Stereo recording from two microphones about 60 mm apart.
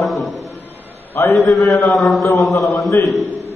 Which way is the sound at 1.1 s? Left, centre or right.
Left.